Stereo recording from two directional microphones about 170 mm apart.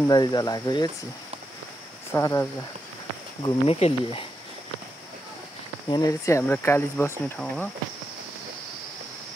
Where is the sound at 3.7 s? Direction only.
35° left (ahead or behind).